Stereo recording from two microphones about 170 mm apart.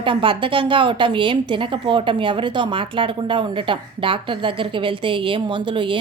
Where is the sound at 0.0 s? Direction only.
30° right (ahead or behind).